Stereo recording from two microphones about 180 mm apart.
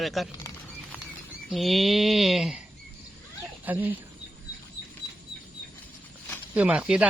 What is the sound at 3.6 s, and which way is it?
Speech, 10° right (ahead or behind).